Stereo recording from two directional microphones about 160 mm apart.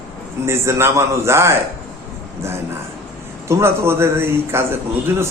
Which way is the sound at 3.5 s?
15° right (ahead or behind).